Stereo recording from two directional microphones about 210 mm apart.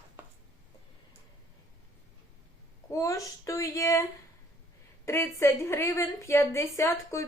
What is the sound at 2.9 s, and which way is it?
A woman's voice, 15° left (ahead or behind).